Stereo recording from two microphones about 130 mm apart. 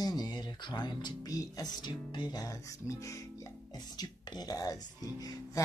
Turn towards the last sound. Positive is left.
turn(degrees=30)  # may be behind; listen again after turning